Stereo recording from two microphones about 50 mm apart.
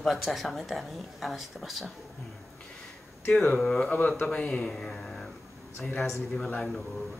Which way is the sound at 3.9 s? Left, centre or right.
Left.